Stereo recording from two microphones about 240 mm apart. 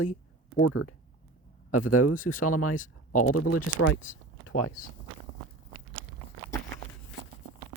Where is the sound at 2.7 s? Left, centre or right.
Left.